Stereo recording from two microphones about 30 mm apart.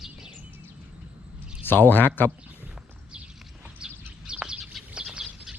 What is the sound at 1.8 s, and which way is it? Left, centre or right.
Speech, left.